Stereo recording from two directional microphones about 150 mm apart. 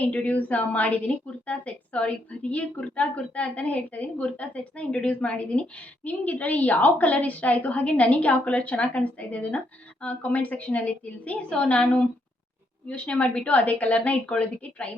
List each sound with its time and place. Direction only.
0.0 s a woman's voice: 10° left (ahead or behind)